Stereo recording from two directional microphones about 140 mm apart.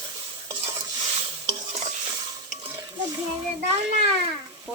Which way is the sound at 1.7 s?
50° right (ahead or behind).